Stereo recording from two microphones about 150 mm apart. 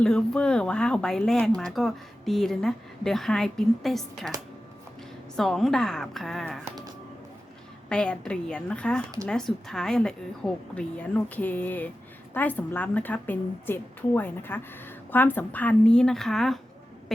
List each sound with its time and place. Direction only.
0.0 s speech: 5° left (ahead or behind)
5.4 s speech: centre (ahead or behind)
7.9 s a woman's voice: 5° left (ahead or behind)